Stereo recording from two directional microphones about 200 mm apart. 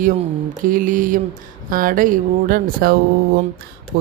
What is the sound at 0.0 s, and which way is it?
Mantra, 40° right (ahead or behind).